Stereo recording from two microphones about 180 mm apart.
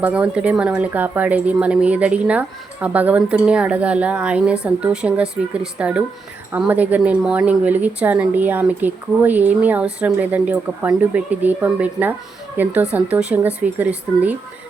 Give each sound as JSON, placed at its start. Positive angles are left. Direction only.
{"t": 0.0, "sound": "a woman's voice", "side_deg": -5}